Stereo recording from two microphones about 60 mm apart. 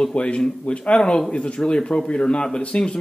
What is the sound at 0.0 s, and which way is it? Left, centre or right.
Speech, centre.